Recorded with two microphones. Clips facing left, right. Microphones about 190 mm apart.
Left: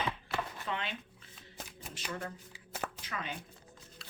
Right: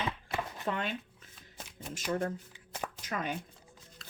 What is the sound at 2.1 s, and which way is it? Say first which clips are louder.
Speech: right 9 dB; 45° right (ahead or behind).